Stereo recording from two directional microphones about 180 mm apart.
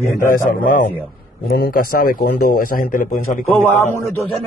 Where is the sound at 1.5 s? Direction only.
55° left (ahead or behind).